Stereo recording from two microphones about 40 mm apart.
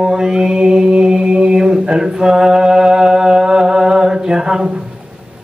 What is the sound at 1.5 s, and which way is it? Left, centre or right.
Mantra, centre.